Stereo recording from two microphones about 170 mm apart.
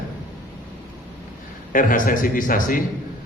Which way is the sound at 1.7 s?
55° left (ahead or behind).